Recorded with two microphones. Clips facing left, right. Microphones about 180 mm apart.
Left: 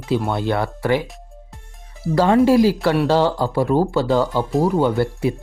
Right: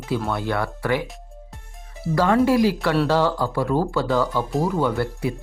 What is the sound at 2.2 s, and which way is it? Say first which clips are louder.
Speech: left 4 dB; 25° left (ahead or behind).